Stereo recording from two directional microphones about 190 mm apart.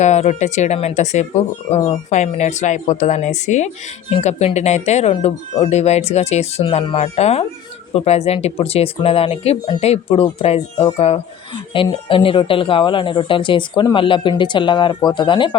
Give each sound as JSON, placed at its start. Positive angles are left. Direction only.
{"t": 0.0, "sound": "speech", "side_deg": 35}